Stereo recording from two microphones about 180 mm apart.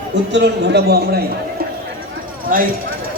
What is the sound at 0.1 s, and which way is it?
A man's voice, 75° right (ahead or behind).